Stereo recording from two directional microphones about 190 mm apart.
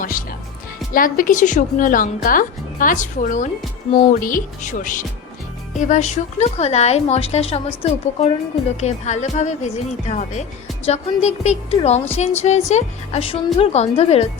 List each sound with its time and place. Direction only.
0.0 s a woman's voice: 45° left (ahead or behind)